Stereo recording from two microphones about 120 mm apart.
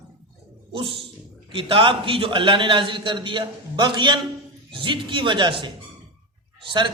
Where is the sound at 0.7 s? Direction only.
45° right (ahead or behind).